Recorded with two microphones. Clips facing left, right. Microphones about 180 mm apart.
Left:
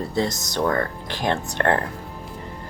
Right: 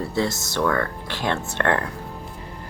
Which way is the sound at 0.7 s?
35° left (ahead or behind).